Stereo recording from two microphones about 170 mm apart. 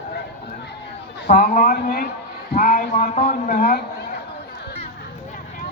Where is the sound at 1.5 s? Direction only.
60° left (ahead or behind).